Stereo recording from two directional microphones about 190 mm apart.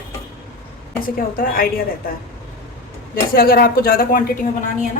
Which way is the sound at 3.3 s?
50° left (ahead or behind).